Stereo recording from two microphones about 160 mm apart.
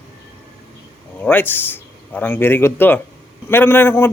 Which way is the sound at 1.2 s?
10° left (ahead or behind).